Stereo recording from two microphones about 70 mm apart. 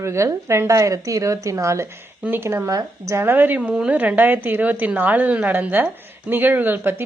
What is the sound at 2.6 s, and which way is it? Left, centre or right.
Speech, right.